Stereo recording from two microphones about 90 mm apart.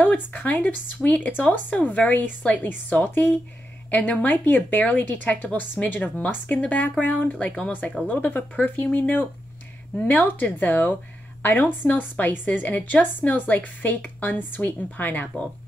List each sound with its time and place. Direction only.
0.0 s a woman's voice: 20° left (ahead or behind)